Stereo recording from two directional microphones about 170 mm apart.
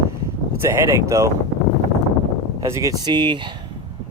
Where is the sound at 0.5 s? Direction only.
15° right (ahead or behind).